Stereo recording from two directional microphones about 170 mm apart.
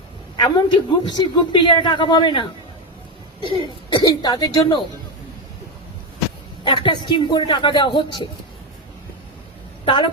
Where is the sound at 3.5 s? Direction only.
25° left (ahead or behind).